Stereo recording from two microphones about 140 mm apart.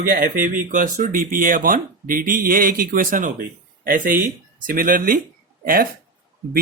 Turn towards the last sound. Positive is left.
turn(degrees=-90)